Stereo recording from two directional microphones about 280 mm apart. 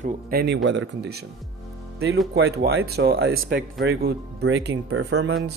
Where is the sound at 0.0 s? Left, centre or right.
Right.